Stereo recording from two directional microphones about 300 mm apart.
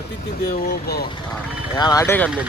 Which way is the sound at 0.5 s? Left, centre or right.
Left.